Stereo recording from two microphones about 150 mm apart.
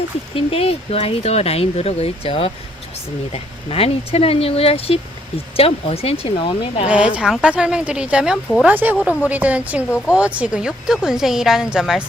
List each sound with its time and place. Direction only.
0.3 s speech: 40° left (ahead or behind)
6.8 s a woman's voice: 10° right (ahead or behind)